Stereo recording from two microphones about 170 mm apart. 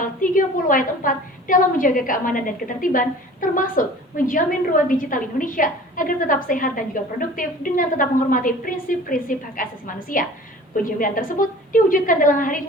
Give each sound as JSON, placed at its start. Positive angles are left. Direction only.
{"t": 0.0, "sound": "a woman's voice", "side_deg": 50}